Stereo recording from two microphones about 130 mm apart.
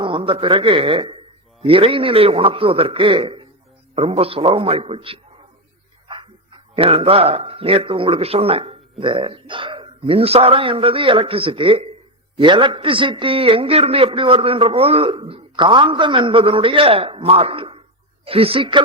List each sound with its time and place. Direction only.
0.0 s a man's voice: 40° right (ahead or behind)